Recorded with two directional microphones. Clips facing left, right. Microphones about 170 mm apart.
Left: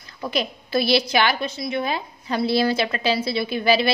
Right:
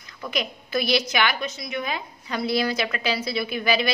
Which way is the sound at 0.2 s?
30° left (ahead or behind).